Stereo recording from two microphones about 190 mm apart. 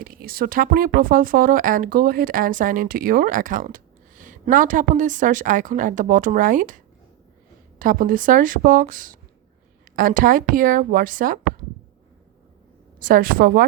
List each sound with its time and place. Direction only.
0.0 s speech: 50° right (ahead or behind)
13.0 s speech: 45° right (ahead or behind)